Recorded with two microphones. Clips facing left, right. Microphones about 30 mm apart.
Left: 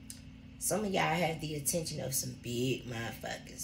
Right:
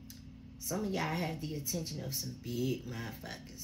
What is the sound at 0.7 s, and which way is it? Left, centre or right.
A woman's voice, left.